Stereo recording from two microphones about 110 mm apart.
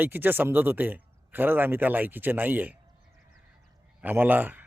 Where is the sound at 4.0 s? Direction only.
15° right (ahead or behind).